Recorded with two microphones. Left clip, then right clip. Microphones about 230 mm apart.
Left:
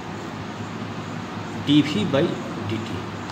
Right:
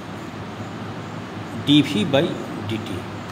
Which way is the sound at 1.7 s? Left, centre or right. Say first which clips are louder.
Right 2 dB; right.